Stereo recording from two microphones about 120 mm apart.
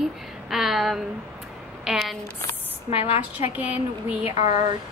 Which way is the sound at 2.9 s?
55° left (ahead or behind).